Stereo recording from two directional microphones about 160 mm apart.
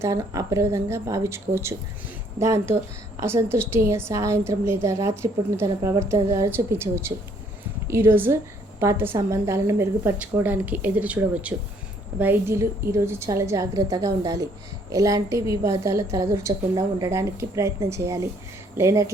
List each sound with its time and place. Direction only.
0.0 s a woman's voice: 20° right (ahead or behind)